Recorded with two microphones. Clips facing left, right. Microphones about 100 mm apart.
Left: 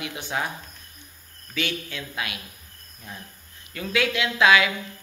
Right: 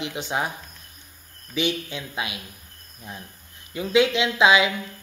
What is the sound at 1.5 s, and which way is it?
A man's voice, 20° right (ahead or behind).